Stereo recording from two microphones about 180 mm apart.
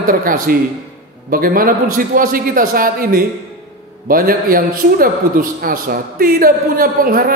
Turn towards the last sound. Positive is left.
turn(degrees=-55)  # may be behind; listen again after turning